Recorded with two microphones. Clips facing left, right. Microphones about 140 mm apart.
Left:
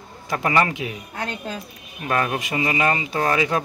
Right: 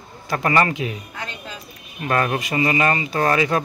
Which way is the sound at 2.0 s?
5° left (ahead or behind).